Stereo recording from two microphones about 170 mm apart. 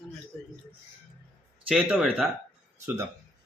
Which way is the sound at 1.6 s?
5° right (ahead or behind).